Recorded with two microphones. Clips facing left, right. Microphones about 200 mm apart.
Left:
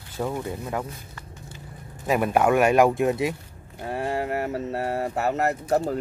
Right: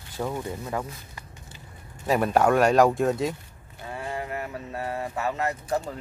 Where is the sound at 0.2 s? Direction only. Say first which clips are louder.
Left 2 dB; 5° left (ahead or behind).